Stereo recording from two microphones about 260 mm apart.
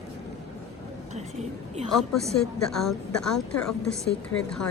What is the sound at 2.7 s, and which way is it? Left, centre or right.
Speech, centre.